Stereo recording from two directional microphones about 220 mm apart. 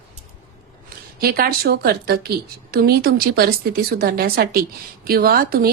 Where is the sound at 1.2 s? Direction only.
45° right (ahead or behind).